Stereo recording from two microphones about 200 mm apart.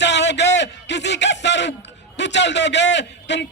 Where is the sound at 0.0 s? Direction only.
60° left (ahead or behind).